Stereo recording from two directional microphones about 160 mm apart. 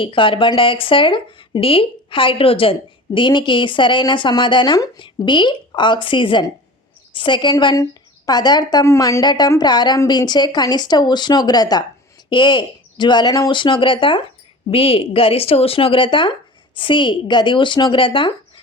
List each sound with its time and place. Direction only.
0.0 s a woman's voice: 30° left (ahead or behind)